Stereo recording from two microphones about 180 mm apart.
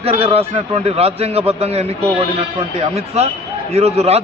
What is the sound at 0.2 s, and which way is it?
A man's voice, 35° right (ahead or behind).